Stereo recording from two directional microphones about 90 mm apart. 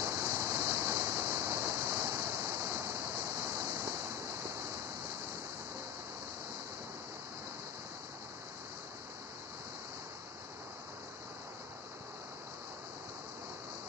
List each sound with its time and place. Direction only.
0.0 s waves: 30° right (ahead or behind)